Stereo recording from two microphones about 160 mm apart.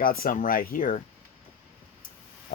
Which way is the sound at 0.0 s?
65° left (ahead or behind).